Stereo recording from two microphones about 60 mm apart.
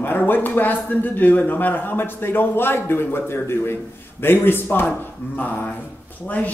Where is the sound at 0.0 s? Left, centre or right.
Left.